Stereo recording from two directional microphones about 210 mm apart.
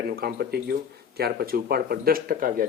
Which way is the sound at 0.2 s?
50° right (ahead or behind).